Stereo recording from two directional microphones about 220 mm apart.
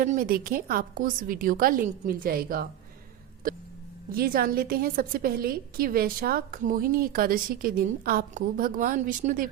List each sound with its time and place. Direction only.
0.0 s a woman's voice: 40° right (ahead or behind)
4.1 s a woman's voice: 40° right (ahead or behind)